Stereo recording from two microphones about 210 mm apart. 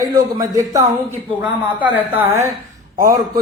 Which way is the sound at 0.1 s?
15° right (ahead or behind).